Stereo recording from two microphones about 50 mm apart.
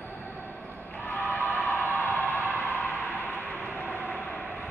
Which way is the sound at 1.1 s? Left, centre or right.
Left.